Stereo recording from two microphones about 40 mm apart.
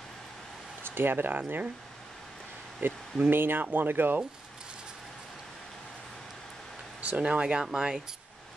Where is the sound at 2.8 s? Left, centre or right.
Right.